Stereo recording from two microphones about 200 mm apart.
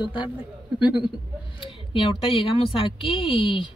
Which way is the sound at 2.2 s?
25° left (ahead or behind).